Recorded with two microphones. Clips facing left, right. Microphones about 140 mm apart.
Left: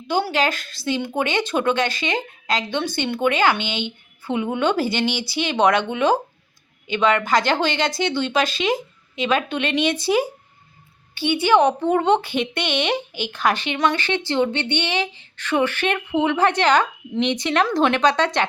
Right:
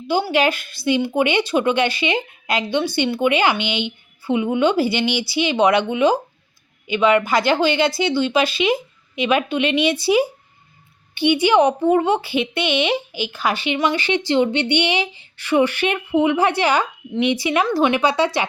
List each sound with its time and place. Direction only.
0.1 s speech: 10° right (ahead or behind)
4.8 s speech: 45° left (ahead or behind)
5.0 s speech: 10° right (ahead or behind)